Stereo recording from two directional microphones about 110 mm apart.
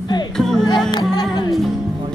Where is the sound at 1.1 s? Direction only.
40° left (ahead or behind).